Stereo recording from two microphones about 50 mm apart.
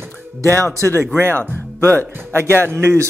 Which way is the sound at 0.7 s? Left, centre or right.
Right.